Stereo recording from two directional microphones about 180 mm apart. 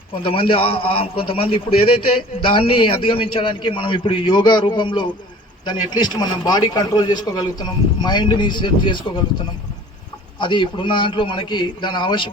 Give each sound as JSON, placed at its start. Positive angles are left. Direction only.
{"t": 0.3, "sound": "a man's voice", "side_deg": 30}
{"t": 10.3, "sound": "a man's voice", "side_deg": 25}